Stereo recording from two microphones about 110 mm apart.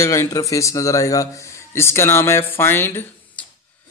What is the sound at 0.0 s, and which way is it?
A man's voice, 30° left (ahead or behind).